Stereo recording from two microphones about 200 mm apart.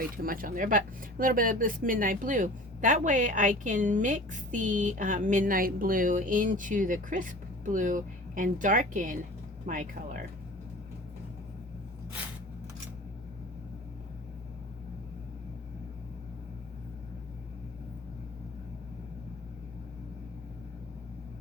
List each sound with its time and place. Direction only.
0.2 s speech: 45° right (ahead or behind)